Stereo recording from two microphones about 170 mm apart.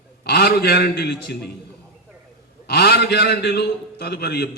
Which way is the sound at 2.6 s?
75° left (ahead or behind).